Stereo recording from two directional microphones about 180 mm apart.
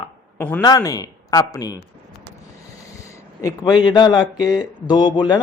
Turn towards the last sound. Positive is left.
turn(degrees=20)  # may be behind; listen again after turning